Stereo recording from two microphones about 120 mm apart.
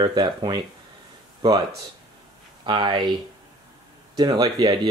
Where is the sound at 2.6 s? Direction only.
40° right (ahead or behind).